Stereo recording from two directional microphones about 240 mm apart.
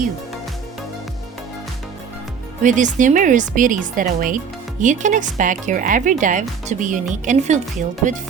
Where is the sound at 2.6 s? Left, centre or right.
Right.